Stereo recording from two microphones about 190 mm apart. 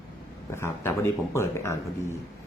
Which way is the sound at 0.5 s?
15° left (ahead or behind).